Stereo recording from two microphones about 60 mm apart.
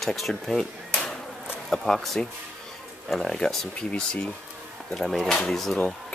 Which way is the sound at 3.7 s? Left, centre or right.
Centre.